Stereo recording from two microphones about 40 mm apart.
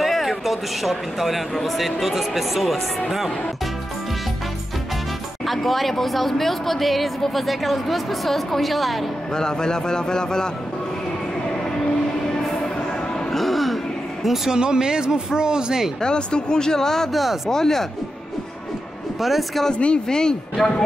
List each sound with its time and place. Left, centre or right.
0.0 s speech: centre
5.5 s speech: centre
9.3 s a man's voice: centre
13.3 s music: centre
14.2 s speech: centre
14.5 s speech: centre
16.0 s speech: left
17.1 s speech: centre
17.5 s a man's voice: centre
19.2 s speech: centre
19.7 s a man's voice: left